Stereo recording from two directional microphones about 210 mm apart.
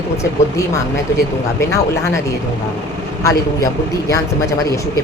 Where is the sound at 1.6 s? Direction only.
15° left (ahead or behind).